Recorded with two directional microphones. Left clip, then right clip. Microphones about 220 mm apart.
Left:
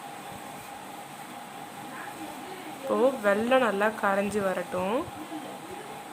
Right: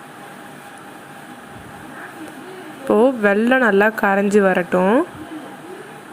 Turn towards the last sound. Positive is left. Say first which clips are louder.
# right 13 dB
turn(degrees=-10)  # may be behind; listen again after turning